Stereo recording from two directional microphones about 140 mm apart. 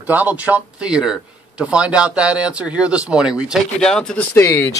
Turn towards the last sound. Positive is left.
turn(degrees=20)  # may be behind; listen again after turning